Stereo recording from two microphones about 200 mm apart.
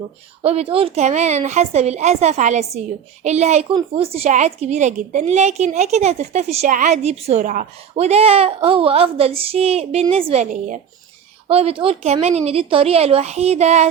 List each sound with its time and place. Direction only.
0.4 s a woman's voice: 30° right (ahead or behind)